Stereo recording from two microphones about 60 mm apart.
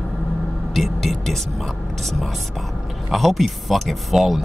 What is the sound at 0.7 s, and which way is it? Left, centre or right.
Speech, centre.